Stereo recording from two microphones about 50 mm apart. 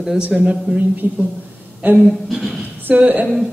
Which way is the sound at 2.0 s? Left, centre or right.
Centre.